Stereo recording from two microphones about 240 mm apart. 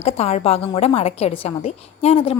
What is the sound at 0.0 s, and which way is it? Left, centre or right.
A woman's voice, left.